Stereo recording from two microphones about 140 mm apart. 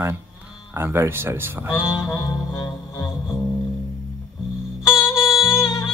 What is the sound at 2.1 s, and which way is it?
Music, 25° left (ahead or behind).